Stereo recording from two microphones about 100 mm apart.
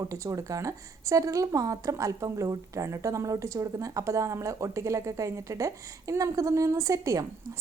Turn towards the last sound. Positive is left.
turn(degrees=-30)  # may be behind; listen again after turning